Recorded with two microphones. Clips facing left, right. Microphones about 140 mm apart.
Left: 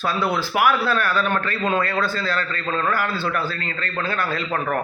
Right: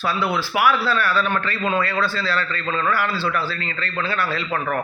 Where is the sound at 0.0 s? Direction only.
40° left (ahead or behind).